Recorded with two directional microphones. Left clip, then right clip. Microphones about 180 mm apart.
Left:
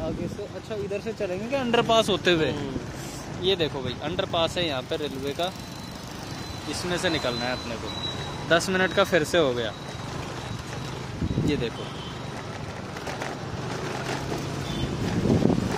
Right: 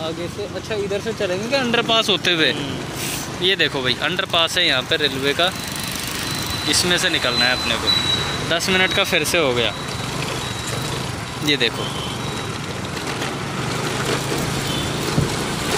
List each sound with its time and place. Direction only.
1.2 s speech: 30° left (ahead or behind)
3.4 s speech: 10° left (ahead or behind)
6.7 s speech: 10° left (ahead or behind)
8.5 s speech: 25° left (ahead or behind)
11.4 s speech: 10° left (ahead or behind)